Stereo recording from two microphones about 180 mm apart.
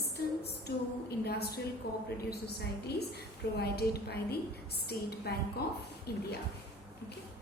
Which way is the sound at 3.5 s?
65° left (ahead or behind).